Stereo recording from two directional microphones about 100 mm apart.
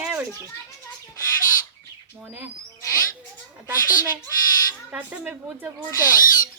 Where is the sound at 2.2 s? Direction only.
20° right (ahead or behind).